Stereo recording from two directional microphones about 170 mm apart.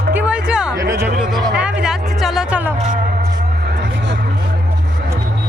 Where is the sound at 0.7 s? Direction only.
20° right (ahead or behind).